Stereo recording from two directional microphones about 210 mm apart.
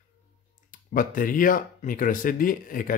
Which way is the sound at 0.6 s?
40° left (ahead or behind).